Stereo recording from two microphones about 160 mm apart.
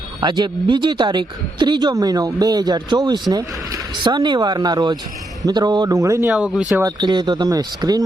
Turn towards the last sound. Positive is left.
turn(degrees=-25)  # may be behind; listen again after turning